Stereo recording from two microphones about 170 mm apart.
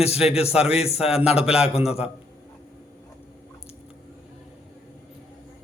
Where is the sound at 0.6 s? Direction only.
35° left (ahead or behind).